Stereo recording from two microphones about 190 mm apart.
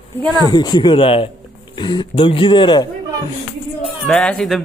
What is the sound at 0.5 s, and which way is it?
Speech, 20° left (ahead or behind).